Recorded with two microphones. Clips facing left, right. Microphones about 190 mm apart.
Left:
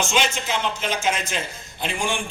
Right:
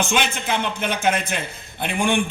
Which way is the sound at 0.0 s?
55° right (ahead or behind).